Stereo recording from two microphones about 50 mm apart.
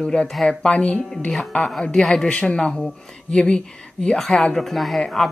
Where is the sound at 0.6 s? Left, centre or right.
Left.